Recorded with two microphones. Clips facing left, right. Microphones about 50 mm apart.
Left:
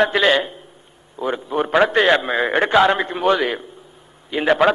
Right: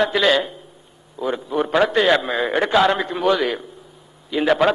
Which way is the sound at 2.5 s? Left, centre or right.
Left.